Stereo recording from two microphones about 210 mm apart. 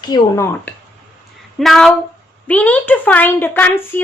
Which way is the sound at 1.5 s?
Centre (ahead or behind).